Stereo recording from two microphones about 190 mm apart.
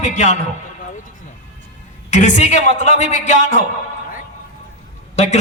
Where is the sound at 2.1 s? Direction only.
40° left (ahead or behind).